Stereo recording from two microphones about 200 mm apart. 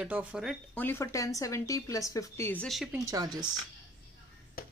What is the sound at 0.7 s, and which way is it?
Speech, 10° left (ahead or behind).